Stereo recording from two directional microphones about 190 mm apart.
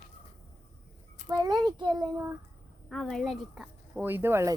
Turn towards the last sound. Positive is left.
turn(degrees=-15)  # may be behind; listen again after turning